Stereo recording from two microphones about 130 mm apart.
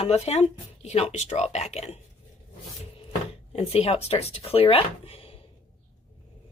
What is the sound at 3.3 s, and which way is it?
Speech, 50° left (ahead or behind).